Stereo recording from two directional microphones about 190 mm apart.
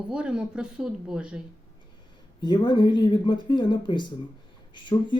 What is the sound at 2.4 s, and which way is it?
Speech, 25° left (ahead or behind).